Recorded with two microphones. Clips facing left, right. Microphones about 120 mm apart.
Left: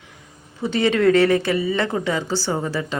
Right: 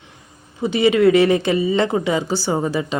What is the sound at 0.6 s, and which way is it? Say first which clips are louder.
A woman's voice: right 3 dB; 10° right (ahead or behind).